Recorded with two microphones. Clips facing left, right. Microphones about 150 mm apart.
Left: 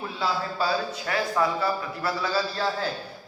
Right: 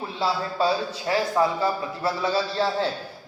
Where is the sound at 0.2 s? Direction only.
25° right (ahead or behind).